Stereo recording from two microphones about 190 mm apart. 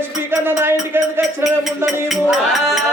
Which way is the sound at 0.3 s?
10° right (ahead or behind).